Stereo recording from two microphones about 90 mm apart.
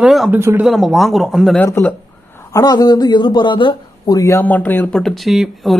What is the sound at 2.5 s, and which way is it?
A woman's voice, 45° left (ahead or behind).